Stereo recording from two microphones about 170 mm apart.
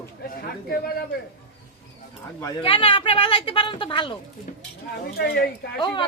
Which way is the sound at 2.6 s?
30° left (ahead or behind).